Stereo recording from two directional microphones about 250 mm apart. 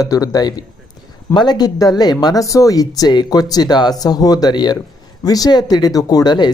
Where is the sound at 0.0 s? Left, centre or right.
Centre.